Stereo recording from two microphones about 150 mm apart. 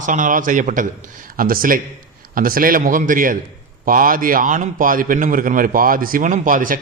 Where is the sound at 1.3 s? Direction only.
70° right (ahead or behind).